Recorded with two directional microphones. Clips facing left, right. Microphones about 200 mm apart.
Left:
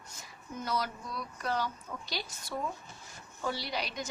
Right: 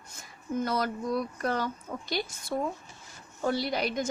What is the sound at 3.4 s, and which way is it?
Speech, 50° right (ahead or behind).